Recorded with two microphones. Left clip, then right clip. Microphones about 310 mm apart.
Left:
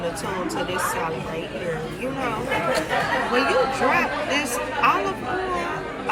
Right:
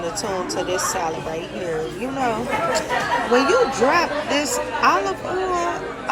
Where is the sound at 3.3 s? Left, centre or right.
Centre.